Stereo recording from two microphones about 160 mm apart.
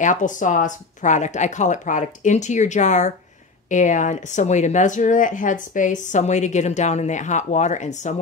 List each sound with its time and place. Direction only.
0.0 s speech: 55° left (ahead or behind)